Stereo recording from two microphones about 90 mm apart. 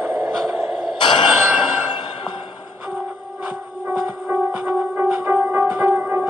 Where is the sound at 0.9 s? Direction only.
60° left (ahead or behind).